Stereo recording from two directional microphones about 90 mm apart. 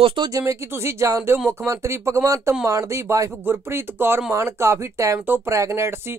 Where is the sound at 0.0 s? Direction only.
65° right (ahead or behind).